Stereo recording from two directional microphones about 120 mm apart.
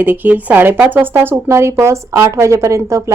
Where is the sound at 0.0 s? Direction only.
15° right (ahead or behind).